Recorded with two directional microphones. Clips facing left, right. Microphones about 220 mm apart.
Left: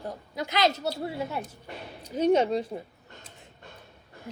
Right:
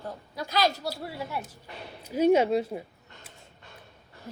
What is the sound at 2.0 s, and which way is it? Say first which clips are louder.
Speech: right 1 dB; 10° right (ahead or behind).